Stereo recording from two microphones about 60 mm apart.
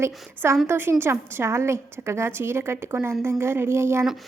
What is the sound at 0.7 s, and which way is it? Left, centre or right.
Speech, right.